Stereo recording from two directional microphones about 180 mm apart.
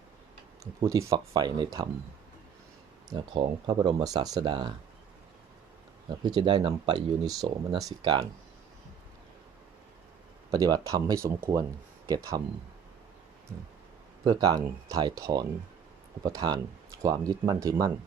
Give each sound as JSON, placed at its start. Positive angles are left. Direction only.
{"t": 0.6, "sound": "speech", "side_deg": -20}
{"t": 3.1, "sound": "speech", "side_deg": -25}
{"t": 6.1, "sound": "speech", "side_deg": -25}
{"t": 10.5, "sound": "speech", "side_deg": -20}
{"t": 14.3, "sound": "speech", "side_deg": -20}